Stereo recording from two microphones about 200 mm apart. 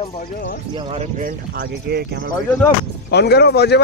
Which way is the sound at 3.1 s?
55° left (ahead or behind).